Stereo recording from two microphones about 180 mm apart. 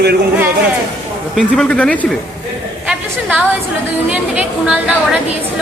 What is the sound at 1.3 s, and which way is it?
Speech, 5° left (ahead or behind).